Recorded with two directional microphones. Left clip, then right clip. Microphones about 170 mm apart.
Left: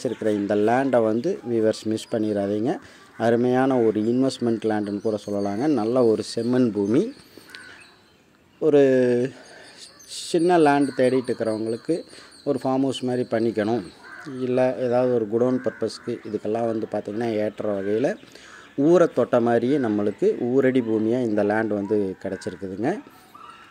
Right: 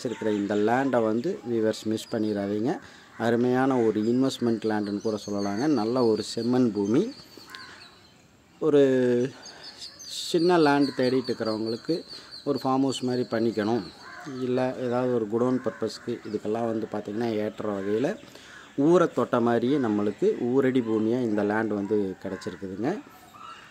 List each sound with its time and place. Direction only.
0.0 s speech: 15° left (ahead or behind)
8.5 s speech: 5° left (ahead or behind)